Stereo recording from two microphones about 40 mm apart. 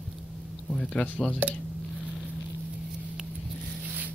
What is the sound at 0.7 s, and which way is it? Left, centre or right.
Speech, left.